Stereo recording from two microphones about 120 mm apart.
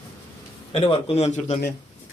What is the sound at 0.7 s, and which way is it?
Speech, 50° left (ahead or behind).